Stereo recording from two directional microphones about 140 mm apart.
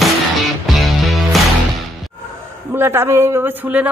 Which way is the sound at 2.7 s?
15° right (ahead or behind).